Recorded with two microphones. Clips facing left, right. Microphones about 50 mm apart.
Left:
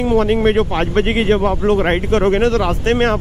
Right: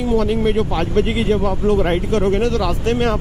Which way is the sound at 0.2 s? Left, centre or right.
Left.